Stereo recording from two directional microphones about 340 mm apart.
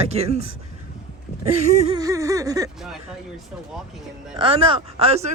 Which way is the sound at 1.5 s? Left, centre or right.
Centre.